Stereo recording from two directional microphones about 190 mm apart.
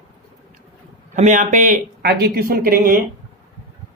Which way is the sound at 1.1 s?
40° right (ahead or behind).